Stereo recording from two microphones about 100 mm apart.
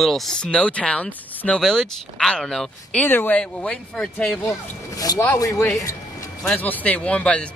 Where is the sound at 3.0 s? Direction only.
20° left (ahead or behind).